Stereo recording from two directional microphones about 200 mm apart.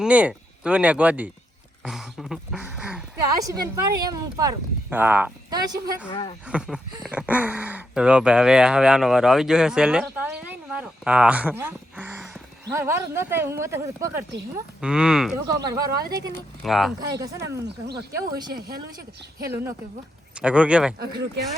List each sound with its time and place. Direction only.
0.0 s speech: 5° right (ahead or behind)
3.3 s speech: 20° right (ahead or behind)
5.5 s speech: 20° right (ahead or behind)
6.1 s speech: 25° left (ahead or behind)
6.5 s speech: 5° right (ahead or behind)
14.8 s speech: 5° right (ahead or behind)
15.6 s speech: 20° right (ahead or behind)
16.6 s speech: centre (ahead or behind)
17.1 s speech: 15° right (ahead or behind)